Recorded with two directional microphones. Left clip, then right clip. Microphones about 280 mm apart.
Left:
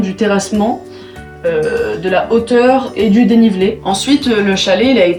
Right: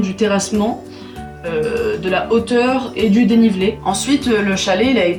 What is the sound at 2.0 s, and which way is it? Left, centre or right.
Speech, centre.